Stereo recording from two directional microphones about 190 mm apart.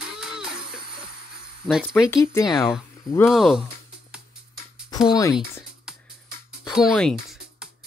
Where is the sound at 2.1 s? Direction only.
15° left (ahead or behind).